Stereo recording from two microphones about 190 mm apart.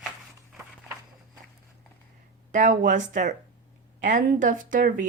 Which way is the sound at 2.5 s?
45° right (ahead or behind).